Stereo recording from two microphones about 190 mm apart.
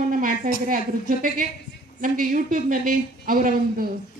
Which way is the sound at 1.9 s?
45° right (ahead or behind).